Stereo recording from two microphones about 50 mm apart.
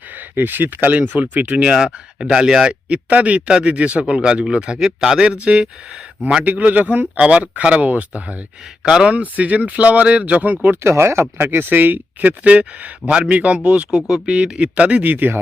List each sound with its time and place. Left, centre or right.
0.2 s speech: right
1.7 s speech: centre
2.9 s speech: right
4.9 s speech: centre
5.2 s speech: right
6.4 s speech: right
8.8 s speech: centre
9.1 s speech: right
10.8 s speech: right
11.4 s speech: right
15.0 s speech: right